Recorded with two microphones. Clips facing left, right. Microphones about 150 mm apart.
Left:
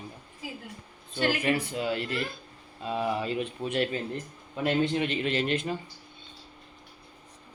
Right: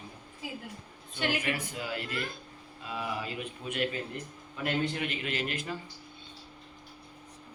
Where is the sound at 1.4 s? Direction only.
30° left (ahead or behind).